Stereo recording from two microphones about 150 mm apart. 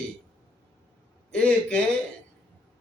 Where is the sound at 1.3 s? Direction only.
5° left (ahead or behind).